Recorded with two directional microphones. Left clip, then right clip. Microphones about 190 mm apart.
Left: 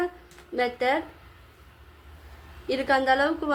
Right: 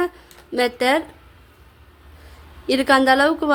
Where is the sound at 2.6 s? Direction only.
55° right (ahead or behind).